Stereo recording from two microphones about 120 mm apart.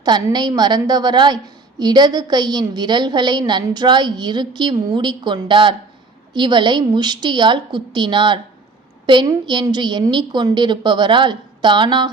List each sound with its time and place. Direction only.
0.0 s a woman's voice: 35° right (ahead or behind)